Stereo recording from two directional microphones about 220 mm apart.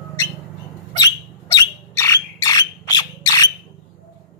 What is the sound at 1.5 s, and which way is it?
Bird, 15° left (ahead or behind).